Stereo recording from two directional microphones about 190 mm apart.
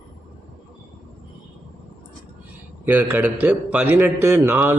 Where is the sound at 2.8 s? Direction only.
10° right (ahead or behind).